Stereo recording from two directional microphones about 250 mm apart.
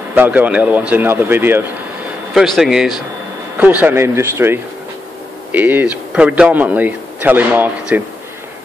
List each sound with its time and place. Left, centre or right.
0.1 s a man's voice: centre